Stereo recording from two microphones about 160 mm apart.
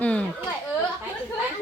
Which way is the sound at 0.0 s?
10° left (ahead or behind).